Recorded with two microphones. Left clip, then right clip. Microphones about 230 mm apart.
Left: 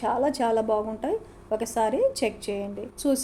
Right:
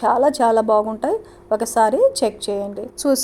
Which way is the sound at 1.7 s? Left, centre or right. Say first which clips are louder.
Right 9 dB; centre.